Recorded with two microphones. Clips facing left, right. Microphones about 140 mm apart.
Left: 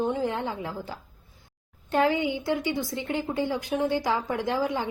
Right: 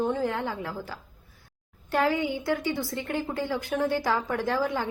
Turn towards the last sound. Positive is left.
turn(degrees=20)  # may be behind; listen again after turning